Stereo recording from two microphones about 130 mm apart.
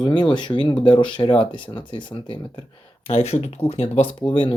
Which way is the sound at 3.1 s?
55° left (ahead or behind).